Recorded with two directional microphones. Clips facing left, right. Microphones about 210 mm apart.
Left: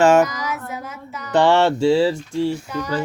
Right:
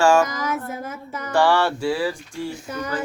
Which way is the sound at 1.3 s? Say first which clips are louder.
Left 4 dB; 20° left (ahead or behind).